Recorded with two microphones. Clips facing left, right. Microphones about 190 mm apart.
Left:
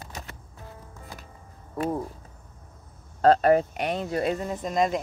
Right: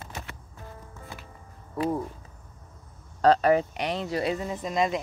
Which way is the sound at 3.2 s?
50° left (ahead or behind).